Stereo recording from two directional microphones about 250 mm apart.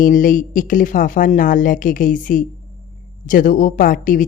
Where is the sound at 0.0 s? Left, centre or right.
Left.